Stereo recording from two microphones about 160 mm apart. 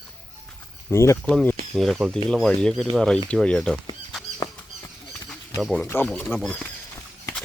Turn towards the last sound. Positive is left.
turn(degrees=0)  # may be behind; listen again after turning